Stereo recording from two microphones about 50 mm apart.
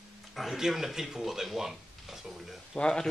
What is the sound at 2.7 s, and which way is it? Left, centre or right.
Speech, centre.